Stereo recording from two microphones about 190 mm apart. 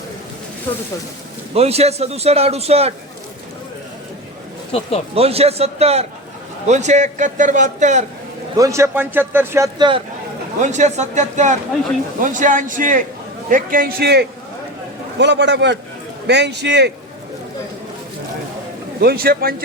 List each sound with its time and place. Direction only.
1.5 s a man's voice: 35° right (ahead or behind)
4.7 s speech: 30° left (ahead or behind)
5.1 s a man's voice: 30° right (ahead or behind)
8.5 s speech: 15° right (ahead or behind)
10.6 s a man's voice: 40° right (ahead or behind); by 16.9 s 65° right (ahead or behind)
18.9 s a man's voice: 55° right (ahead or behind)